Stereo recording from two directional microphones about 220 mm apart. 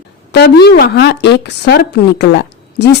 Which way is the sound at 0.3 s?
50° left (ahead or behind).